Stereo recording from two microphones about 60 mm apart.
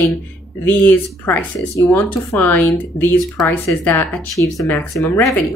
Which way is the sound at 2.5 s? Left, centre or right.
Left.